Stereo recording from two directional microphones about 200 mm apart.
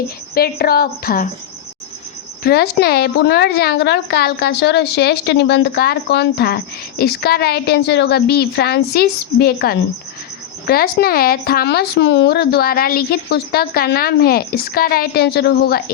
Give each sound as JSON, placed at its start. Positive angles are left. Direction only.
{"t": 0.3, "sound": "speech", "side_deg": 50}
{"t": 2.4, "sound": "speech", "side_deg": 50}